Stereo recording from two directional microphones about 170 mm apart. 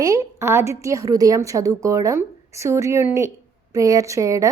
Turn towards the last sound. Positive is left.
turn(degrees=-20)  # may be behind; listen again after turning